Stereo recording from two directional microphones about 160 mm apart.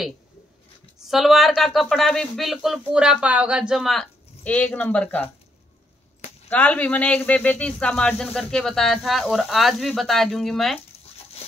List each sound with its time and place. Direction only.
1.0 s speech: centre (ahead or behind)
6.5 s speech: 10° left (ahead or behind)
11.4 s a sound: 40° left (ahead or behind)